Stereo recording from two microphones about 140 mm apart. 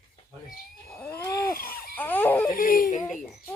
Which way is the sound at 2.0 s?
15° left (ahead or behind).